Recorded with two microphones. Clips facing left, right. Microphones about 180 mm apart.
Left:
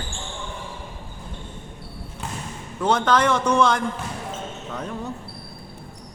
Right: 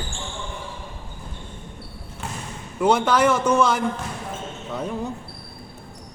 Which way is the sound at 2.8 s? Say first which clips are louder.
Right 2 dB; 10° right (ahead or behind).